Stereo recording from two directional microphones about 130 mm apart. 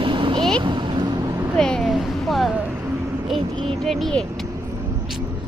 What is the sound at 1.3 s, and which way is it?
Vehicle, 20° right (ahead or behind).